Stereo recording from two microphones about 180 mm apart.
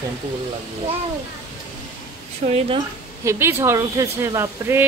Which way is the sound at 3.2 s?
15° right (ahead or behind).